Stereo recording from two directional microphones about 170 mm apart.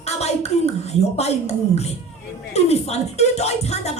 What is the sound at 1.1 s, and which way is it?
Music, 40° left (ahead or behind).